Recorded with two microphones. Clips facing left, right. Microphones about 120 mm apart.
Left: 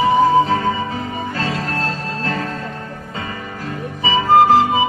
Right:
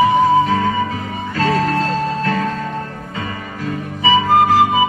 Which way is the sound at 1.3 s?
30° left (ahead or behind).